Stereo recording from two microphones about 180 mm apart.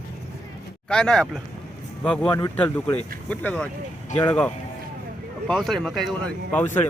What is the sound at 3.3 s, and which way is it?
Speech, 5° left (ahead or behind).